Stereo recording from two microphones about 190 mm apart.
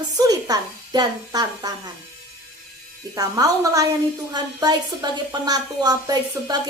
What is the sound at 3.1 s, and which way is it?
A woman's voice, 20° right (ahead or behind).